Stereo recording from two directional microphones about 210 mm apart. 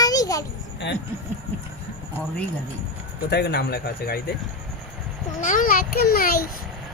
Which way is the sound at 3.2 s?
50° left (ahead or behind).